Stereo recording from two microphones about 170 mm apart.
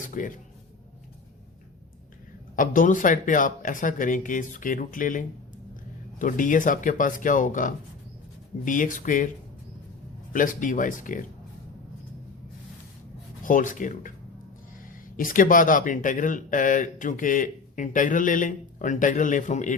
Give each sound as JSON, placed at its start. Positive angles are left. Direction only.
{"t": 0.0, "sound": "speech", "side_deg": 50}
{"t": 2.6, "sound": "speech", "side_deg": 50}
{"t": 10.3, "sound": "speech", "side_deg": 50}
{"t": 13.4, "sound": "speech", "side_deg": 50}